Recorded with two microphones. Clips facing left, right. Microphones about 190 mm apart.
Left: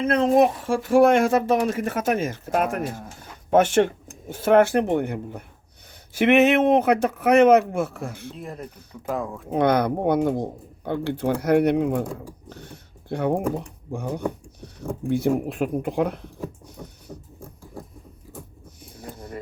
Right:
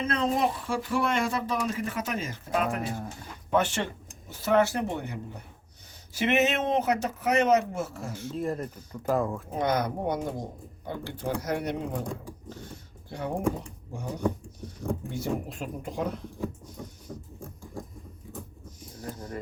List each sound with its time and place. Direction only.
0.1 s speech: 50° left (ahead or behind)
1.5 s speech: 70° left (ahead or behind)
2.0 s speech: 50° left (ahead or behind)
2.9 s speech: centre (ahead or behind)
3.5 s speech: 50° left (ahead or behind)
8.3 s speech: centre (ahead or behind)
9.5 s speech: 65° left (ahead or behind)
17.1 s a sound: 10° left (ahead or behind)